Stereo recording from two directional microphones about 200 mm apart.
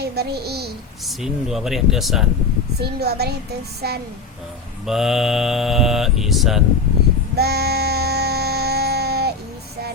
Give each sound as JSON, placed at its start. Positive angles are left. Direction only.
{"t": 0.0, "sound": "a child's voice", "side_deg": -55}
{"t": 1.0, "sound": "speech", "side_deg": 0}
{"t": 2.7, "sound": "a child's voice", "side_deg": -55}
{"t": 4.9, "sound": "speech", "side_deg": 0}
{"t": 7.3, "sound": "a sound", "side_deg": -55}